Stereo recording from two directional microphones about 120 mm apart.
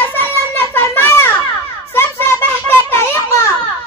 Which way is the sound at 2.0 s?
20° left (ahead or behind).